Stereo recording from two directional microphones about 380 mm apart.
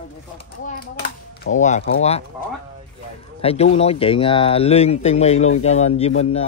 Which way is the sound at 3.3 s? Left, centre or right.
Centre.